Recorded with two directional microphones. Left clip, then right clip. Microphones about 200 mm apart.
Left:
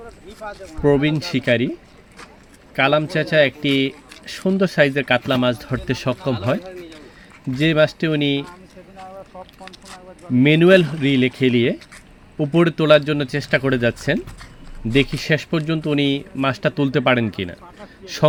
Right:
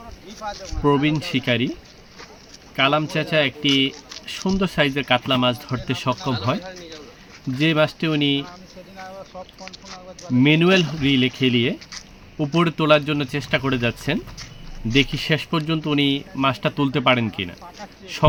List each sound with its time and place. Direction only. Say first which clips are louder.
0.7 s speech: left 2 dB; 10° left (ahead or behind)
2.7 s speech: left 2 dB; 15° left (ahead or behind)
7.6 s speech: left 3 dB; 15° left (ahead or behind)
10.3 s speech: left 4 dB; 15° left (ahead or behind)
15.2 s speech: left 2 dB; 15° left (ahead or behind)